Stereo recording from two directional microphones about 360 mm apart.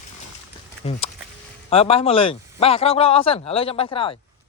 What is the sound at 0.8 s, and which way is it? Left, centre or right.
Speech, centre.